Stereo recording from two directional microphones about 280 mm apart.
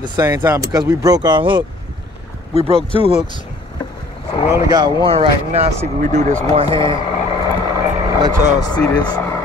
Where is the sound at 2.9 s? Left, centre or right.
Left.